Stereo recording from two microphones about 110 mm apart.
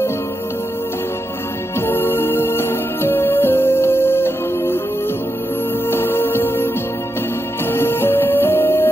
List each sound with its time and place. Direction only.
1.8 s music: 20° left (ahead or behind)
5.9 s music: 20° left (ahead or behind)
7.7 s music: 20° left (ahead or behind)